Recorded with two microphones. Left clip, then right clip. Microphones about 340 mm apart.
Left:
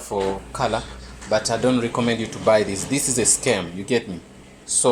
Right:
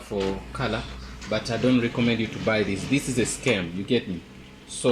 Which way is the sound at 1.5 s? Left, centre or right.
Left.